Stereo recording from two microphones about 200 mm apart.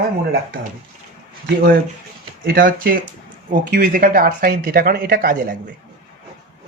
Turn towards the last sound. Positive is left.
turn(degrees=-45)  # may be behind; listen again after turning